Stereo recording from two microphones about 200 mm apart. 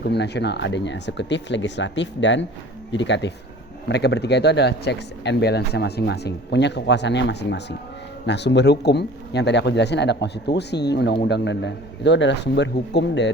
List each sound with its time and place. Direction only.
0.0 s speech: 55° left (ahead or behind)